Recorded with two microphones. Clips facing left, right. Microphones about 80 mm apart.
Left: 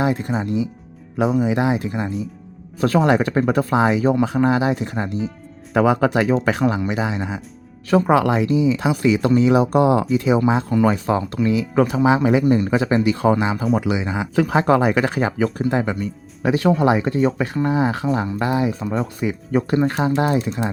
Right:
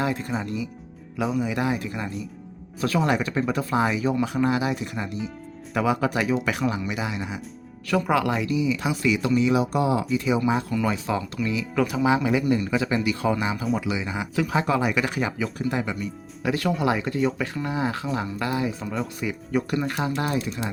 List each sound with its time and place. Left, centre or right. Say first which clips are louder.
0.0 s speech: left 6 dB; left
1.4 s speech: left 6 dB; left
2.8 s speech: left 7 dB; left
9.2 s speech: left 6 dB; left
10.2 s speech: left 5 dB; left
14.3 s speech: left 7 dB; left
16.5 s speech: left 7 dB; left